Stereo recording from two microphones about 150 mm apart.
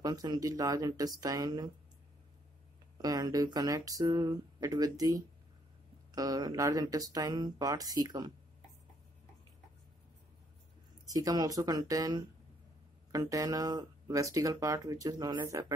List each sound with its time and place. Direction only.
0.0 s speech: 25° right (ahead or behind)
3.0 s speech: 25° right (ahead or behind)
11.1 s speech: 25° right (ahead or behind)